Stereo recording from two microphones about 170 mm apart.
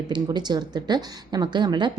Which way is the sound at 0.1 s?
25° right (ahead or behind).